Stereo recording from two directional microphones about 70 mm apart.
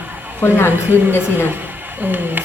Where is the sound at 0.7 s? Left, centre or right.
Right.